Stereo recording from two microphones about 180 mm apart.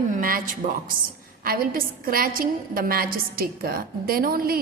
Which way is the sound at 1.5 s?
55° right (ahead or behind).